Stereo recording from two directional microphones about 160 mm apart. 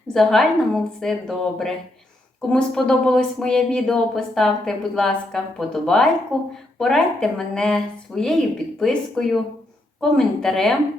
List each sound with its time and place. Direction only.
0.1 s speech: centre (ahead or behind)